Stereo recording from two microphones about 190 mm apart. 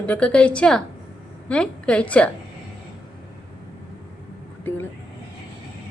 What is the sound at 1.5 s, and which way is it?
Speech, 5° left (ahead or behind).